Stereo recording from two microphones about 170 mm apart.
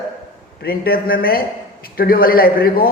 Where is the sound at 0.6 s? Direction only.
60° left (ahead or behind).